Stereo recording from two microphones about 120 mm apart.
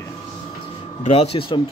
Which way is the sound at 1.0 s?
60° left (ahead or behind).